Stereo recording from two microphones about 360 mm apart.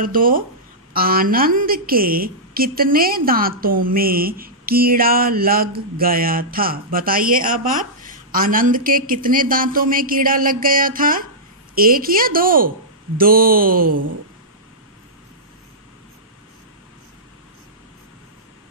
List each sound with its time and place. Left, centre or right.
0.0 s a woman's voice: right